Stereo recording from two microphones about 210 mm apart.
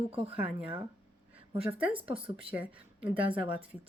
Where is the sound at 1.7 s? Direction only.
25° right (ahead or behind).